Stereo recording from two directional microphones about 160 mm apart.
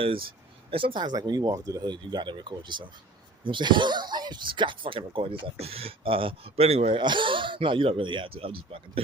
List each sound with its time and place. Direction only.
0.0 s speech: 35° right (ahead or behind)